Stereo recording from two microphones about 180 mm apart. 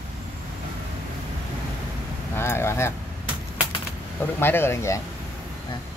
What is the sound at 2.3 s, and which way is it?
Speech, 15° left (ahead or behind).